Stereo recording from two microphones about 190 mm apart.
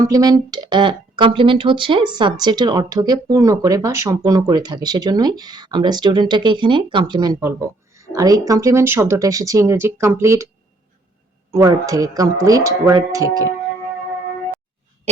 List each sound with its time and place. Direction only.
0.0 s speech: 20° right (ahead or behind)
11.5 s speech: 15° right (ahead or behind)